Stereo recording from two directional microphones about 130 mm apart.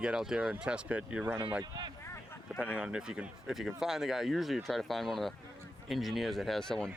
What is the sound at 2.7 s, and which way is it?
Speech, 5° right (ahead or behind).